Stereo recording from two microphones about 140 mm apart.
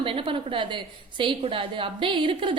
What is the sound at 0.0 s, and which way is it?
A woman's voice, 40° right (ahead or behind).